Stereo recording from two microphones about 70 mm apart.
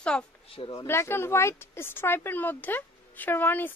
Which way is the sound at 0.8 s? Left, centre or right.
Left.